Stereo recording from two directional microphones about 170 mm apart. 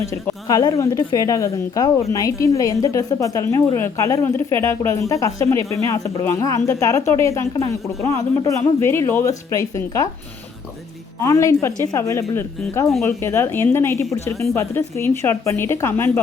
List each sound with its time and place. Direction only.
0.0 s a woman's voice: 20° left (ahead or behind)
11.2 s speech: 20° left (ahead or behind)